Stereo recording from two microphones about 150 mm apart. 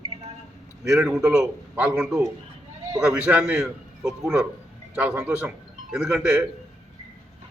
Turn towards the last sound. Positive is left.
turn(degrees=-5)  # may be behind; listen again after turning